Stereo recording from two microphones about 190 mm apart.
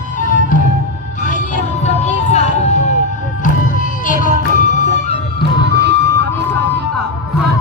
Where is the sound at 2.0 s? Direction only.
35° left (ahead or behind).